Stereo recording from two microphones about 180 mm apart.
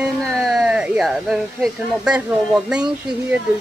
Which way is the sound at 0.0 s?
Centre (ahead or behind).